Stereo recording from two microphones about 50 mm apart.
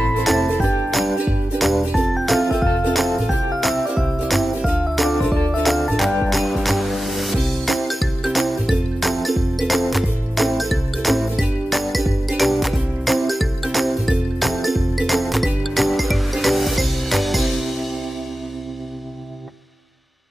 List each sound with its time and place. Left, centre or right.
0.2 s jingle: centre
0.8 s music: centre
2.0 s jingle: centre
2.9 s music: centre
4.6 s music: centre
4.9 s music: centre